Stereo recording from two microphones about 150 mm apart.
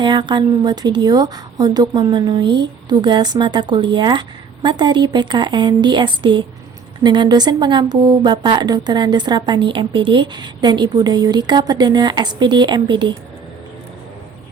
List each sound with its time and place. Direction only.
0.0 s a woman's voice: 30° right (ahead or behind)